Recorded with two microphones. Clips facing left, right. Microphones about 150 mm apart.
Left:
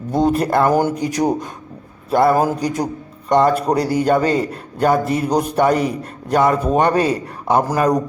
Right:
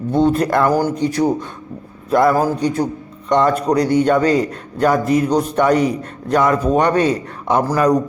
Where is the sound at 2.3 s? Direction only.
10° left (ahead or behind).